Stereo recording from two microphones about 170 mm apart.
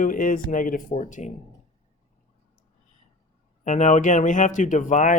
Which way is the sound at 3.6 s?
45° left (ahead or behind).